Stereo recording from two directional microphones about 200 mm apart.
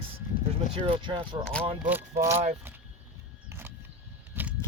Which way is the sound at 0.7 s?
25° right (ahead or behind).